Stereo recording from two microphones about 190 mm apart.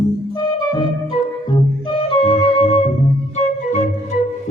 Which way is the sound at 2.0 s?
30° left (ahead or behind).